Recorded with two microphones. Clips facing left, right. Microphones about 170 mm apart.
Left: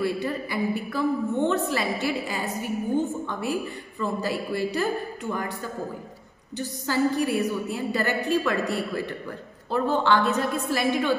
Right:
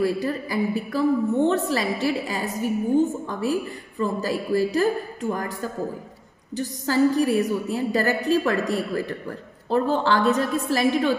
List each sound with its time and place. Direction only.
0.0 s a woman's voice: 35° right (ahead or behind)